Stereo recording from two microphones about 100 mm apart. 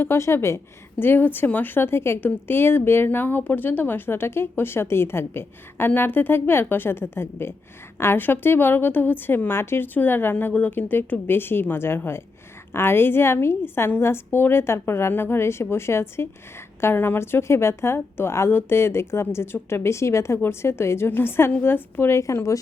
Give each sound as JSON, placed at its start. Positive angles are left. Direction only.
{"t": 0.0, "sound": "a woman's voice", "side_deg": 25}